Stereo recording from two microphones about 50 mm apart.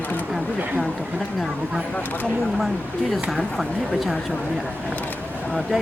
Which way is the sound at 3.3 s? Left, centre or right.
Centre.